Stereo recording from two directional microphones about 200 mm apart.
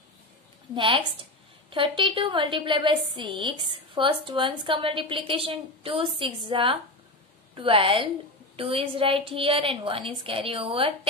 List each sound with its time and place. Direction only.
0.7 s a woman's voice: 25° right (ahead or behind)